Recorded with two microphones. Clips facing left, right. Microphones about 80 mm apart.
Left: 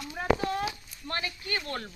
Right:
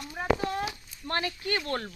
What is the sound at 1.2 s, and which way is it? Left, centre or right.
Speech, right.